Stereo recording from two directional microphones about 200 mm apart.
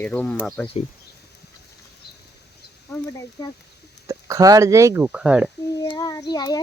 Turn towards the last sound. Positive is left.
turn(degrees=20)  # may be behind; listen again after turning